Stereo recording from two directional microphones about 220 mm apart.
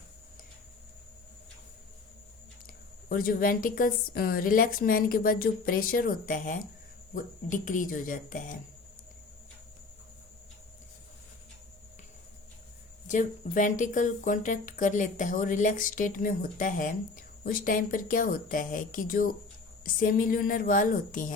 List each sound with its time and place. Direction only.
3.1 s speech: 40° left (ahead or behind)
13.1 s speech: 35° left (ahead or behind)